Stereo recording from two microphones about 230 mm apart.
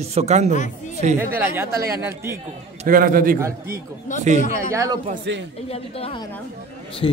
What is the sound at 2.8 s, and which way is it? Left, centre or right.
Speech, right.